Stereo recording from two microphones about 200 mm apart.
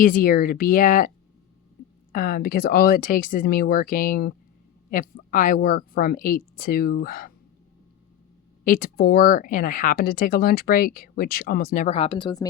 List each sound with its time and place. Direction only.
0.0 s speech: 45° left (ahead or behind)
2.1 s speech: 45° left (ahead or behind)
8.6 s speech: 45° left (ahead or behind); by 12.5 s 20° left (ahead or behind)